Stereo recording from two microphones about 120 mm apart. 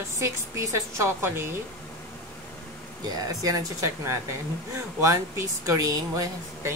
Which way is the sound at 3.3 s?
30° right (ahead or behind).